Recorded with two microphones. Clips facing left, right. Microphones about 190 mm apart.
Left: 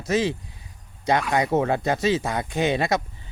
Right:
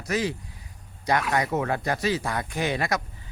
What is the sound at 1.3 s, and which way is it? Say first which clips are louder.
Speech: left 4 dB; 25° left (ahead or behind).